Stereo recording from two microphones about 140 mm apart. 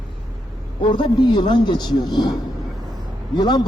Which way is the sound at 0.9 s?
35° left (ahead or behind).